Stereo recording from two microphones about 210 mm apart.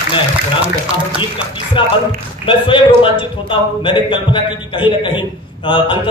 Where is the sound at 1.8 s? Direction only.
25° left (ahead or behind).